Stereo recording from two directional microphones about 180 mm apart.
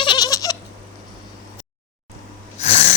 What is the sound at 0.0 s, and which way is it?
Goat, 25° left (ahead or behind).